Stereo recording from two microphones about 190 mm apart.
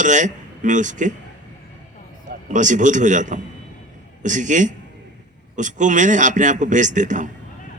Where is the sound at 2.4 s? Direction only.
40° right (ahead or behind).